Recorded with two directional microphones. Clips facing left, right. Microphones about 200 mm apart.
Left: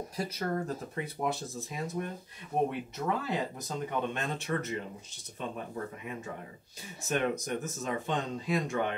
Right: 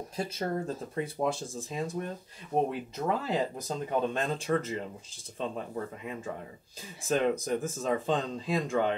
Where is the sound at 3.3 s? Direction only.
30° right (ahead or behind).